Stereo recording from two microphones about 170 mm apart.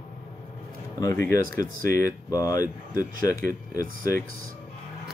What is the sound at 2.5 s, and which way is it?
Speech, 55° right (ahead or behind).